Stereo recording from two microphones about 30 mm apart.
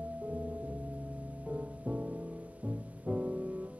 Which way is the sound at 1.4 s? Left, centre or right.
Right.